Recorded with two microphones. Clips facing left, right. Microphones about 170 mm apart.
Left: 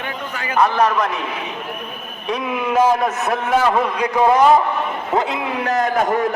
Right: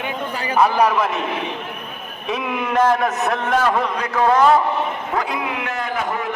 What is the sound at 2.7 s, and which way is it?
A man's voice, 5° left (ahead or behind).